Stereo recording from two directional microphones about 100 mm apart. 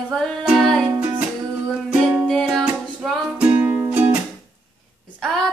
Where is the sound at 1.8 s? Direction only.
10° right (ahead or behind).